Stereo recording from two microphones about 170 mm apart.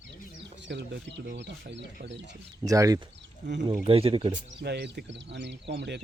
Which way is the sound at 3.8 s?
35° right (ahead or behind).